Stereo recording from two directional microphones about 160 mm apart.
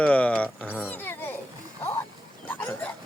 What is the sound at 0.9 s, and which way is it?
Children playing, 10° left (ahead or behind).